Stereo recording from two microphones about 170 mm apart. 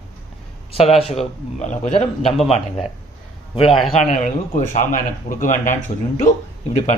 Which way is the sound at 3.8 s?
5° left (ahead or behind).